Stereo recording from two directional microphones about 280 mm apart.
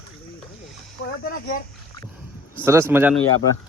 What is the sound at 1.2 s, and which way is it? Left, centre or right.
Speech, left.